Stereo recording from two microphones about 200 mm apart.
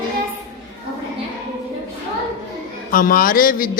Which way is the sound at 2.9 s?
45° left (ahead or behind).